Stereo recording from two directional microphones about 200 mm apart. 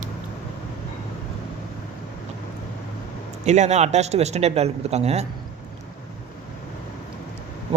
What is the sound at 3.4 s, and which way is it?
Speech, 35° right (ahead or behind).